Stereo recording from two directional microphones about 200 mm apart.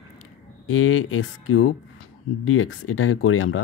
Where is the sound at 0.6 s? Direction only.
90° left.